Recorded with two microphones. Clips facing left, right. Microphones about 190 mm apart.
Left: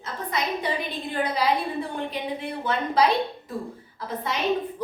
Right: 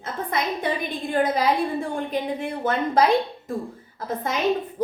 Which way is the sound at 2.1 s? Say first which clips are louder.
Right 4 dB; 45° right (ahead or behind).